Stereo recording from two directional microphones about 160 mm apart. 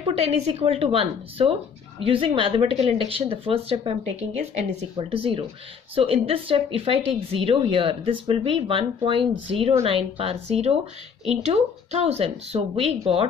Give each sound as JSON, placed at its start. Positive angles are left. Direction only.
{"t": 0.0, "sound": "speech", "side_deg": -40}